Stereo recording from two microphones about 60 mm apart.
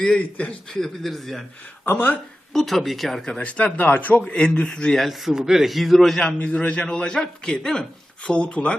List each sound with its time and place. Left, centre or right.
0.2 s speech: left
0.7 s a man's voice: centre
1.8 s speech: left
2.5 s a man's voice: centre
3.3 s speech: left
4.3 s speech: centre
4.9 s a man's voice: centre
6.4 s speech: centre